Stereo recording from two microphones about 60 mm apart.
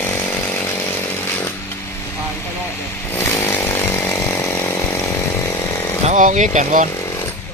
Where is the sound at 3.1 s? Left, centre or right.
Left.